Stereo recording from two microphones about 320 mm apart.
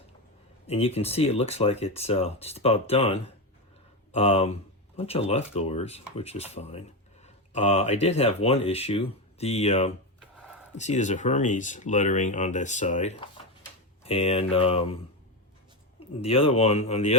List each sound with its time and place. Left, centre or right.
0.7 s speech: centre
16.0 s speech: centre